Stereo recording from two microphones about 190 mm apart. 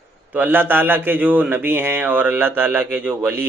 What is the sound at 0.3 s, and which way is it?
A man's voice, 10° right (ahead or behind).